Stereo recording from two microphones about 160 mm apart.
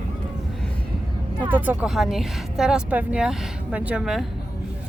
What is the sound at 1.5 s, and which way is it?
Speech, 10° right (ahead or behind).